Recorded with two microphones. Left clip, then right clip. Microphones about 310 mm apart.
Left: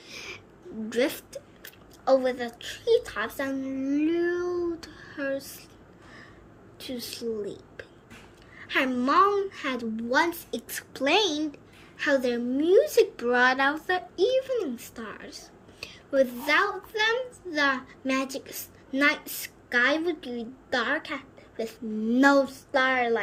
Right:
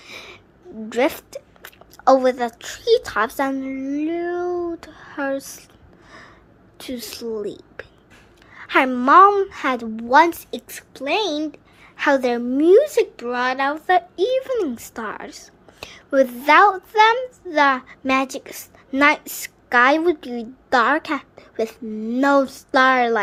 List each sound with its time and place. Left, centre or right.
0.0 s a sound: centre
0.9 s speech: centre
6.1 s a sound: centre
6.7 s a woman's voice: centre
22.0 s speech: centre
22.4 s a woman's voice: centre